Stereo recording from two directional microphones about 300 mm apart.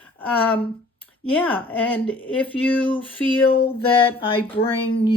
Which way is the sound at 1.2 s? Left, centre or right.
Centre.